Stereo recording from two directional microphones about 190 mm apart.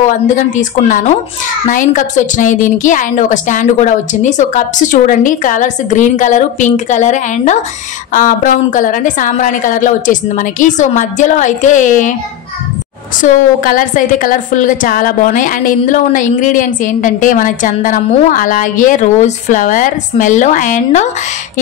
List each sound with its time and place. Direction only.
0.4 s a woman's voice: 40° left (ahead or behind)
13.2 s a woman's voice: 45° left (ahead or behind)